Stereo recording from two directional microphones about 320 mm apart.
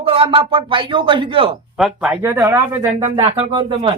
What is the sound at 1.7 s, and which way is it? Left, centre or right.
Speech, centre.